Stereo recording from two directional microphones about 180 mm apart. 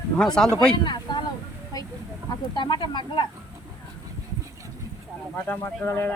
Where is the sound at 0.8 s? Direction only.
25° left (ahead or behind).